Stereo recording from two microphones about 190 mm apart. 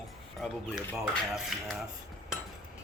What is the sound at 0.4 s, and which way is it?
Speech, centre (ahead or behind).